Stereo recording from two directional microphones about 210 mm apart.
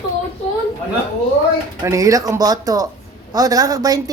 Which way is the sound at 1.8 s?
15° right (ahead or behind).